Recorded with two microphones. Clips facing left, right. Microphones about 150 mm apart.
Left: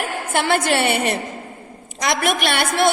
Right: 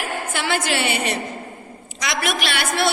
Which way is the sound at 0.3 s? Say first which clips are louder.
Left 5 dB; 55° left (ahead or behind).